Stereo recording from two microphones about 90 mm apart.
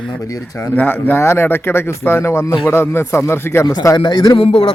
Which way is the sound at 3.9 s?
55° left (ahead or behind).